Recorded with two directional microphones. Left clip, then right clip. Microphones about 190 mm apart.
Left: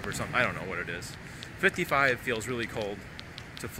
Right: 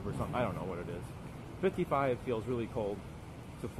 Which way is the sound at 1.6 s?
10° left (ahead or behind).